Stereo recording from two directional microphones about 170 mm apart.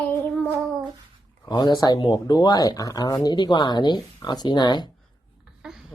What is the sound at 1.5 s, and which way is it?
Speech, 25° left (ahead or behind).